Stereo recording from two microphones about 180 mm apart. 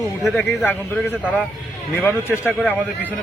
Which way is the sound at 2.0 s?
10° left (ahead or behind).